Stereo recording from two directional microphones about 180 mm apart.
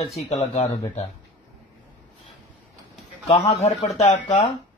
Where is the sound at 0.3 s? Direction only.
35° left (ahead or behind).